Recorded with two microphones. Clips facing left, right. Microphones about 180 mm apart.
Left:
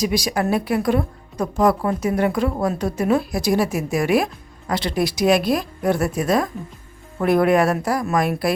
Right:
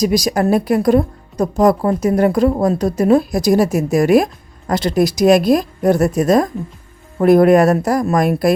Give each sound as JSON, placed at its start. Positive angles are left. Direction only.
{"t": 0.0, "sound": "a woman's voice", "side_deg": -40}